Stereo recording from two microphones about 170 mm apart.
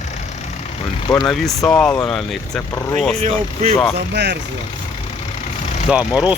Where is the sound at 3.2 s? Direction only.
40° right (ahead or behind).